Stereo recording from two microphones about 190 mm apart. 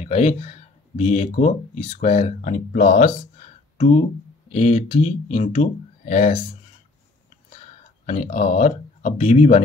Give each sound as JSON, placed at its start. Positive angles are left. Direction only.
{"t": 0.0, "sound": "speech", "side_deg": 35}
{"t": 8.1, "sound": "speech", "side_deg": 35}